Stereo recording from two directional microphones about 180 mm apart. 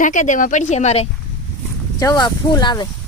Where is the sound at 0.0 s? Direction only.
45° left (ahead or behind).